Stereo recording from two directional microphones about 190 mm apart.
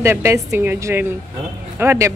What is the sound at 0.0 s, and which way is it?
A woman's voice, 15° right (ahead or behind).